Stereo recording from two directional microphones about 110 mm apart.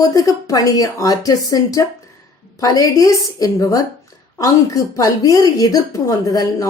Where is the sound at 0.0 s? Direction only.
30° left (ahead or behind).